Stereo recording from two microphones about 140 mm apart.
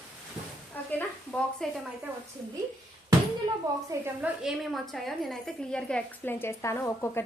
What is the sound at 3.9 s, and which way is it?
Speech, 15° right (ahead or behind).